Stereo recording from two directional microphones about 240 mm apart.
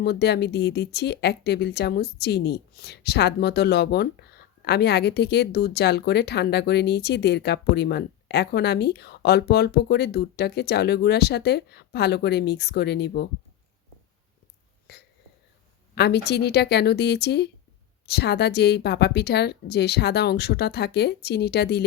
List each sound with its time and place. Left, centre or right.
0.0 s speech: left
14.9 s hiccup: left
16.0 s speech: left